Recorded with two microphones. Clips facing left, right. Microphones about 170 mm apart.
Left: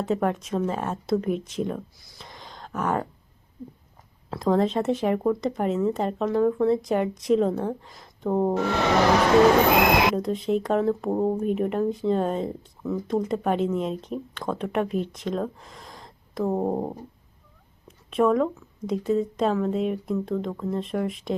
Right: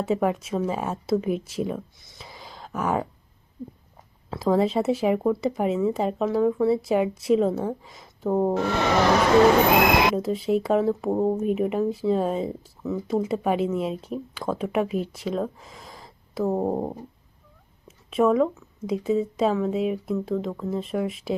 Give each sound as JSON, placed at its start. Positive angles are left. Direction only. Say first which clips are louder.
{"t": 0.0, "sound": "speech", "louder": "right 1 dB", "side_deg": -5}
{"t": 4.3, "sound": "speech", "louder": "right 1 dB", "side_deg": 0}
{"t": 10.2, "sound": "speech", "louder": "right 1 dB", "side_deg": -5}